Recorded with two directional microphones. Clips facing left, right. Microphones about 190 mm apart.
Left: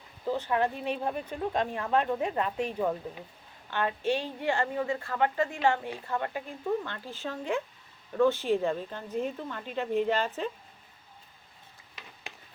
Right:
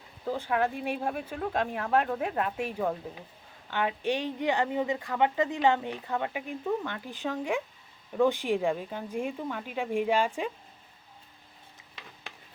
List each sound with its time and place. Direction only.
0.3 s a woman's voice: 10° right (ahead or behind)